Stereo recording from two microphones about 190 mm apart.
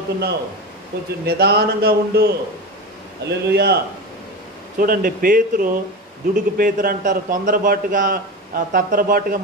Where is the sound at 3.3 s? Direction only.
60° right (ahead or behind).